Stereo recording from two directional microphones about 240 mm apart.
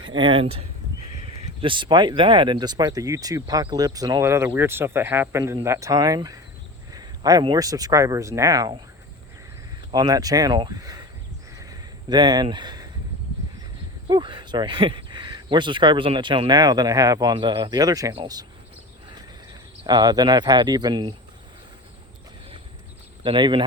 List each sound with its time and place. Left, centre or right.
0.0 s speech: centre
9.9 s speech: centre
11.5 s a sound: centre
14.1 s speech: centre
19.8 s speech: centre
23.2 s speech: right